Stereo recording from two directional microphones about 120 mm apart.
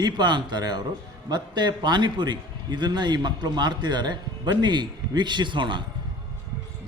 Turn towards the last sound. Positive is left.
turn(degrees=-40)  # may be behind; listen again after turning